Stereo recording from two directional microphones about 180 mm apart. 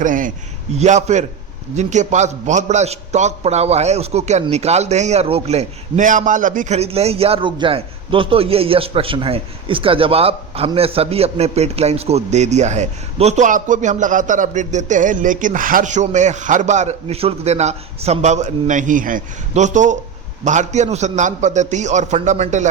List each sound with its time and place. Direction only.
0.0 s a man's voice: 45° right (ahead or behind)